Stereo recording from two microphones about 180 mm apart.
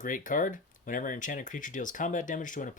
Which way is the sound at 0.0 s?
45° left (ahead or behind).